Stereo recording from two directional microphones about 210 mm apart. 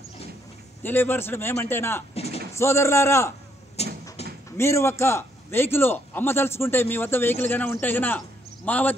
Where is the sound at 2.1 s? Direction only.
30° left (ahead or behind).